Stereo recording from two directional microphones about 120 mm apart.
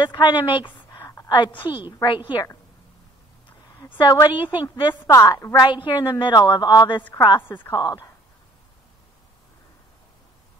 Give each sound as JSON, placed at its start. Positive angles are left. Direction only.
{"t": 0.0, "sound": "a woman's voice", "side_deg": 40}
{"t": 0.9, "sound": "a sound", "side_deg": 25}
{"t": 1.3, "sound": "a woman's voice", "side_deg": 40}
{"t": 4.0, "sound": "a woman's voice", "side_deg": 40}
{"t": 5.1, "sound": "a woman's voice", "side_deg": 25}
{"t": 5.6, "sound": "a woman's voice", "side_deg": 40}
{"t": 7.0, "sound": "a woman's voice", "side_deg": 15}
{"t": 7.7, "sound": "a woman's voice", "side_deg": 30}